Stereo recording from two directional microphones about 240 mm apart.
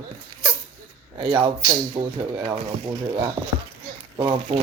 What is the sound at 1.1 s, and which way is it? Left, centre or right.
Speech, right.